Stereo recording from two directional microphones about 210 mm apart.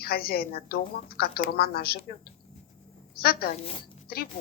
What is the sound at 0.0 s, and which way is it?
A woman's voice, 45° left (ahead or behind).